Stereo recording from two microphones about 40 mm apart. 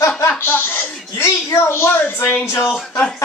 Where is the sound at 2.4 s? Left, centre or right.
Left.